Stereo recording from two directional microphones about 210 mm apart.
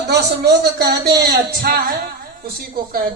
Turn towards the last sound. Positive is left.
turn(degrees=-45)  # may be behind; listen again after turning